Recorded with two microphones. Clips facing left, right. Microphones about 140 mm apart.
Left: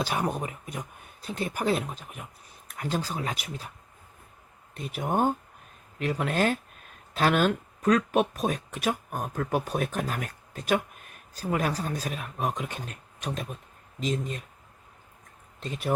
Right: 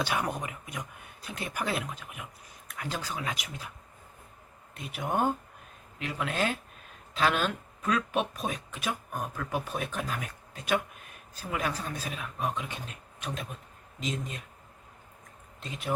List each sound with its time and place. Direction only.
0.0 s speech: 35° left (ahead or behind)
4.8 s speech: 40° left (ahead or behind)